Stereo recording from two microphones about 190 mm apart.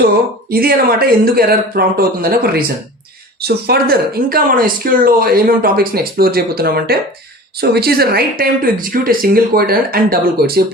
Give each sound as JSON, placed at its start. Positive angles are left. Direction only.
{"t": 0.5, "sound": "speech", "side_deg": -50}